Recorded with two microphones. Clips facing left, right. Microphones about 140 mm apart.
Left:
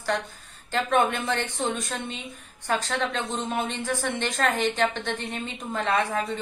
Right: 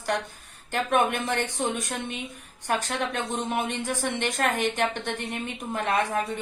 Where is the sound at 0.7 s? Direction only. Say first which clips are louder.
Left 1 dB; 15° right (ahead or behind).